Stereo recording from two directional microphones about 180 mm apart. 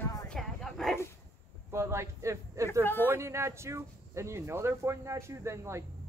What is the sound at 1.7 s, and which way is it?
Speech, 15° right (ahead or behind).